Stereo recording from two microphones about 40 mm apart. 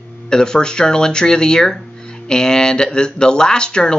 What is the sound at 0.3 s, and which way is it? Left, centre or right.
Speech, centre.